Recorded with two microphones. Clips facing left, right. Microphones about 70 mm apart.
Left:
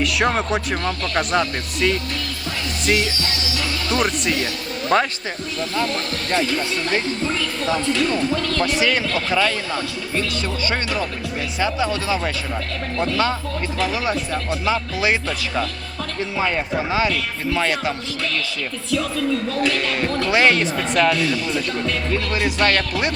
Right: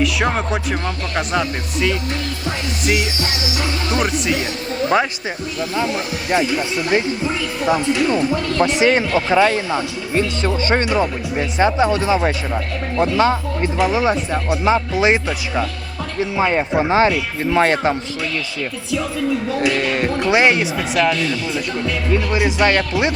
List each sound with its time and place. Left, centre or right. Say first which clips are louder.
0.0 s speech: right 1 dB; centre
3.9 s speech: right 1 dB; centre
4.4 s speech: right 4 dB; centre
19.5 s speech: right 3 dB; centre
22.1 s speech: right 7 dB; centre